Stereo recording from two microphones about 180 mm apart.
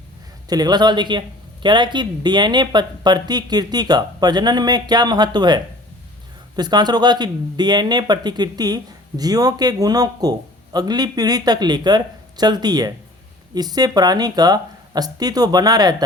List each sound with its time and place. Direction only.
0.4 s speech: 20° right (ahead or behind)
6.6 s speech: 25° right (ahead or behind)